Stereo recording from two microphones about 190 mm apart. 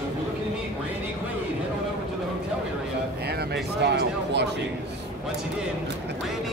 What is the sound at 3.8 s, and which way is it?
Speech, 65° right (ahead or behind).